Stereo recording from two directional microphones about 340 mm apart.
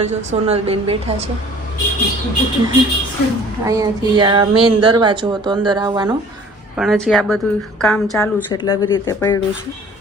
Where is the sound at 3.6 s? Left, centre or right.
Centre.